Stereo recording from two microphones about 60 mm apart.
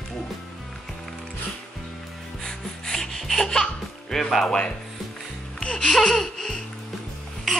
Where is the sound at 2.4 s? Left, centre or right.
Centre.